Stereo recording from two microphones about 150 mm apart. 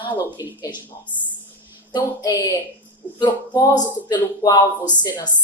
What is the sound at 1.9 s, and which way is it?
Speech, 25° left (ahead or behind).